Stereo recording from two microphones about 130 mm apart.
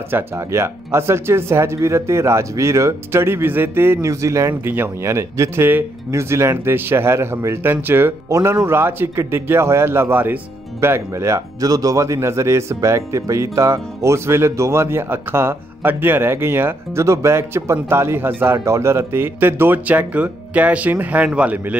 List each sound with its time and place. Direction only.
0.1 s speech: 20° right (ahead or behind)